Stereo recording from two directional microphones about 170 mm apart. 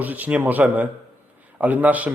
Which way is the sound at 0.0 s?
10° right (ahead or behind).